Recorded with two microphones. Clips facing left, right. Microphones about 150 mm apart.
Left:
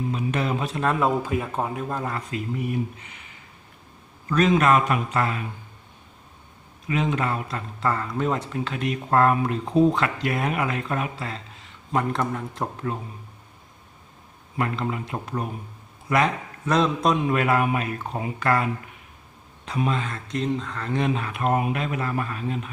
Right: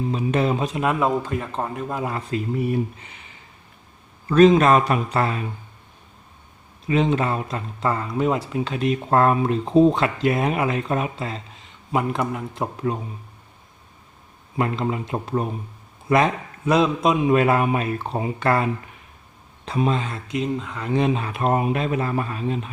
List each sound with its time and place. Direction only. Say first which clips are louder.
0.1 s speech: right 7 dB; 30° right (ahead or behind)
0.9 s a man's voice: right 1 dB; 5° left (ahead or behind)
2.0 s a man's voice: right 3 dB; 15° right (ahead or behind)
2.3 s speech: right 6 dB; 30° right (ahead or behind)
4.3 s speech: right 5 dB; 30° right (ahead or behind)
6.8 s speech: right 4 dB; 25° right (ahead or behind)
11.9 s a man's voice: right 1 dB; 10° right (ahead or behind)
12.9 s a man's voice: right 6 dB; 20° right (ahead or behind)
14.5 s speech: right 3 dB; 25° right (ahead or behind)
16.6 s a man's voice: right 3 dB; 5° right (ahead or behind)
17.2 s speech: right 4 dB; 25° right (ahead or behind)
20.2 s speech: right 1 dB; 5° right (ahead or behind); by 22.7 s 25° right (ahead or behind)